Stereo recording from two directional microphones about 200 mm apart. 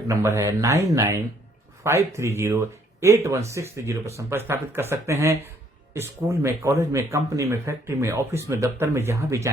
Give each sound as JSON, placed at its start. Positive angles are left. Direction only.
{"t": 0.1, "sound": "speech", "side_deg": -15}